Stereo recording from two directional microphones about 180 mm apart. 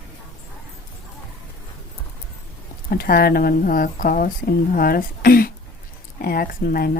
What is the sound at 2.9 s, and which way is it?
Speech, 55° left (ahead or behind).